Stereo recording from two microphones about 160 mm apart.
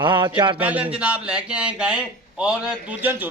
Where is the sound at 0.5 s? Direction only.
10° right (ahead or behind).